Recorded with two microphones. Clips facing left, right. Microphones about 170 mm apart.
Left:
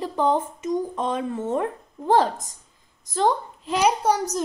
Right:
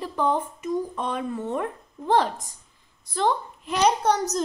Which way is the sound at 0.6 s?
20° left (ahead or behind).